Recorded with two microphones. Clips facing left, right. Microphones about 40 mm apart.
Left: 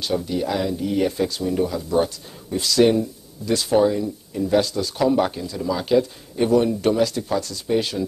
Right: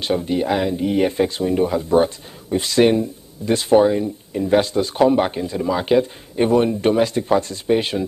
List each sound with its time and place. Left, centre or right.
0.0 s speech: right